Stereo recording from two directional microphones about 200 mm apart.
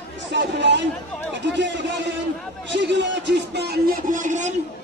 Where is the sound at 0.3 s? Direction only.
60° right (ahead or behind).